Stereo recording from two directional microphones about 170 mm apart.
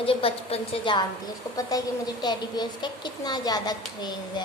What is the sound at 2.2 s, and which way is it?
A woman's voice, 25° left (ahead or behind).